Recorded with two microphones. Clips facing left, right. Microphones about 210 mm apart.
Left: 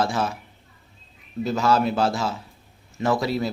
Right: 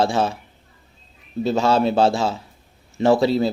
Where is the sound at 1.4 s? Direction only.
30° right (ahead or behind).